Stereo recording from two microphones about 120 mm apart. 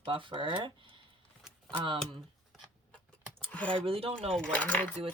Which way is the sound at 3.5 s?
10° left (ahead or behind).